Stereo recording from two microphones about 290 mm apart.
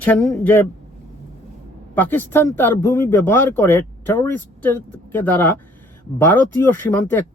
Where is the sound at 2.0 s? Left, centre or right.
Centre.